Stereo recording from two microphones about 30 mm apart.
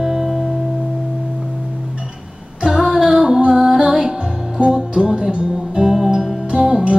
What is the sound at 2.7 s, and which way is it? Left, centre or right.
Female singing, centre.